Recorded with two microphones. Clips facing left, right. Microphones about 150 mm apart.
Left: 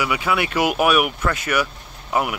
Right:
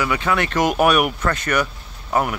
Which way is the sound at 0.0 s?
10° left (ahead or behind).